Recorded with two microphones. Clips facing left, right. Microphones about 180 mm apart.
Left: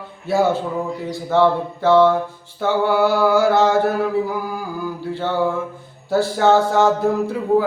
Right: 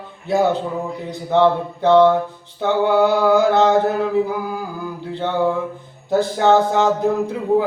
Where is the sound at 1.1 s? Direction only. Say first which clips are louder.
Right 1 dB; 20° right (ahead or behind).